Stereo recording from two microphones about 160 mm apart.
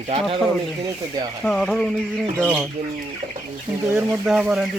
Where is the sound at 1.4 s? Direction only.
5° left (ahead or behind).